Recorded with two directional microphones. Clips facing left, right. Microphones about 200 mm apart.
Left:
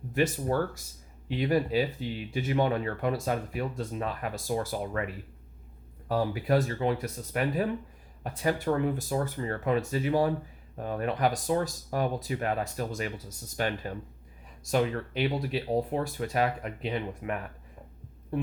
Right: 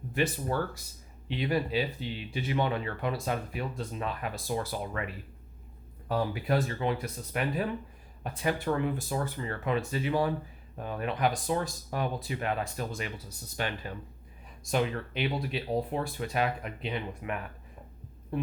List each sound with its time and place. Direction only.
0.1 s speech: 45° left (ahead or behind)